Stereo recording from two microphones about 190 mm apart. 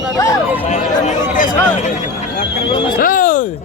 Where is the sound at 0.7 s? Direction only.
40° left (ahead or behind).